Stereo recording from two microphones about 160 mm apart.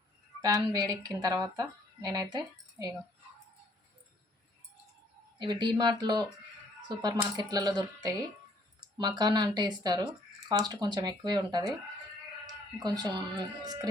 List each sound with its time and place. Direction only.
0.4 s speech: 20° right (ahead or behind)
5.4 s speech: 30° right (ahead or behind)
12.8 s speech: 25° right (ahead or behind)